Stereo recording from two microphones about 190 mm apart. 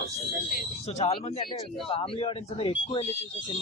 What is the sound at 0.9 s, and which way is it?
Speech, 35° left (ahead or behind).